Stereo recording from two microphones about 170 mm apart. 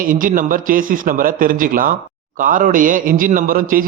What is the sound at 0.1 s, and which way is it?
A man's voice, 50° right (ahead or behind).